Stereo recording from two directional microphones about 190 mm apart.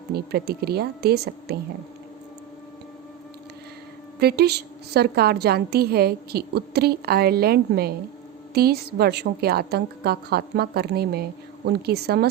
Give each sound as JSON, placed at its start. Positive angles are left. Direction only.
{"t": 0.1, "sound": "a woman's voice", "side_deg": -55}
{"t": 4.2, "sound": "a woman's voice", "side_deg": -55}